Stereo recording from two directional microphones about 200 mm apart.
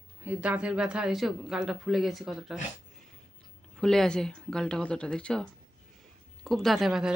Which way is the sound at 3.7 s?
Centre (ahead or behind).